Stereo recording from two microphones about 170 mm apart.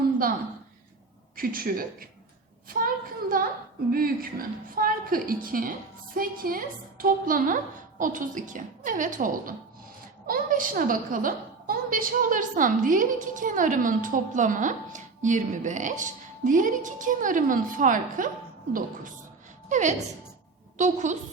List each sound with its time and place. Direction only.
1.4 s a woman's voice: 60° right (ahead or behind)
2.6 s a sound: 55° right (ahead or behind)
3.9 s a woman's voice: 60° right (ahead or behind)
19.6 s a woman's voice: 45° right (ahead or behind)